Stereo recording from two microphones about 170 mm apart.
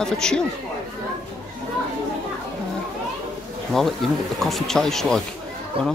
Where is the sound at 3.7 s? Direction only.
Centre (ahead or behind).